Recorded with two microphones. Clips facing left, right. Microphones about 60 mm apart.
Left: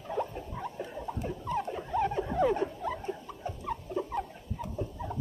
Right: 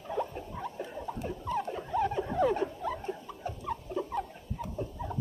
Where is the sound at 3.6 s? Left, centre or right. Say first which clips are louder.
Left 1 dB; centre.